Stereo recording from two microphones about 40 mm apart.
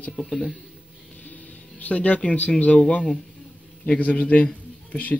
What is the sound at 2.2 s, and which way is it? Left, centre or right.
A man's voice, left.